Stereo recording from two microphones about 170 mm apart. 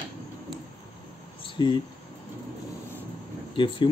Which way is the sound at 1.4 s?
30° left (ahead or behind).